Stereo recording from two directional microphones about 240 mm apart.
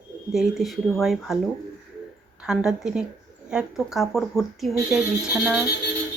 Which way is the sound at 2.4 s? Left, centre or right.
Centre.